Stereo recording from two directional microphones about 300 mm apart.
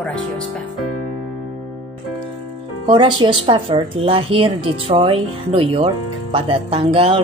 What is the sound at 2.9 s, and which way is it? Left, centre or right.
A woman's voice, centre.